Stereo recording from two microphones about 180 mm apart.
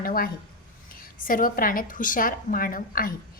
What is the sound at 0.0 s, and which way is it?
A woman's voice, 55° left (ahead or behind).